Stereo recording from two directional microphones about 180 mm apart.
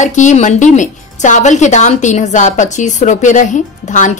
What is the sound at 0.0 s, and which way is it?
Speech, 40° left (ahead or behind).